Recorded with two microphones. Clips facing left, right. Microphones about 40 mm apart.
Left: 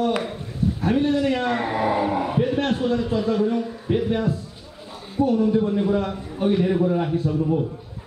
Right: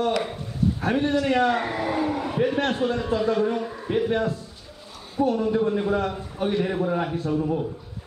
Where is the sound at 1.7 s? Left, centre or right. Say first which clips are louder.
Left 4 dB; centre.